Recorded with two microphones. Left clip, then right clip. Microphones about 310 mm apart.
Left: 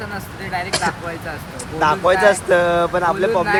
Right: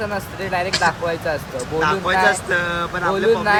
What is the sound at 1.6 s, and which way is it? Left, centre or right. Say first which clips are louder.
Speech: left 4 dB; centre.